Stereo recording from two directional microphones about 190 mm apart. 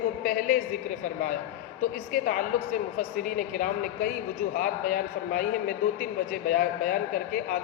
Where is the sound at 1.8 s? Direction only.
45° left (ahead or behind).